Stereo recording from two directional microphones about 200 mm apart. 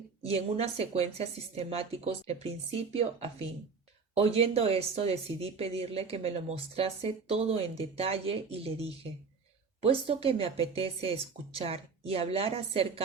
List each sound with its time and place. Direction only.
0.2 s speech: 30° right (ahead or behind)